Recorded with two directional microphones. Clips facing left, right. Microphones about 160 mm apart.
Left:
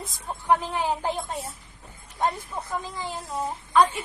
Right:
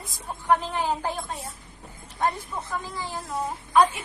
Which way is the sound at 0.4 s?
10° left (ahead or behind).